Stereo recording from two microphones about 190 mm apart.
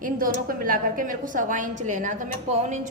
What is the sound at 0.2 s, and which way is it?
A woman's voice, 45° right (ahead or behind).